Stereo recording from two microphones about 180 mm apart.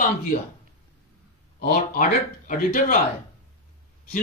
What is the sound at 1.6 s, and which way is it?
A man's voice, 50° left (ahead or behind).